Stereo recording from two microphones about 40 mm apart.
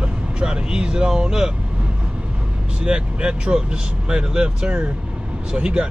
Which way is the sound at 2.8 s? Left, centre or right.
Right.